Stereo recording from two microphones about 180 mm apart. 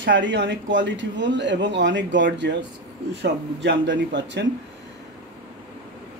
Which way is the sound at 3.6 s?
75° right (ahead or behind).